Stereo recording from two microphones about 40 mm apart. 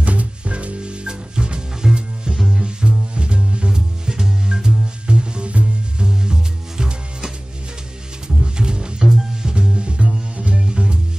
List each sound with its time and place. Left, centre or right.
0.0 s music: right; by 2.6 s centre
2.6 s music: right
6.0 s music: centre
8.5 s music: right